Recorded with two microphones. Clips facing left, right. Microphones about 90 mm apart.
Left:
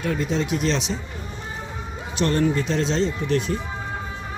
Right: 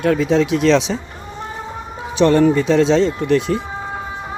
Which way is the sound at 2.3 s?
90° right.